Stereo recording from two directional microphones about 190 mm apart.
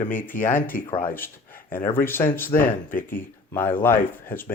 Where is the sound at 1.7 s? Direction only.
10° left (ahead or behind).